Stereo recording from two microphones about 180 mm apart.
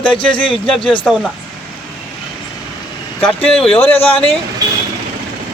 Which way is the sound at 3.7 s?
30° left (ahead or behind).